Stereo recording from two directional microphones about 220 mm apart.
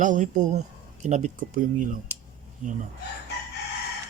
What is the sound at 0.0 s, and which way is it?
Speech, 35° right (ahead or behind).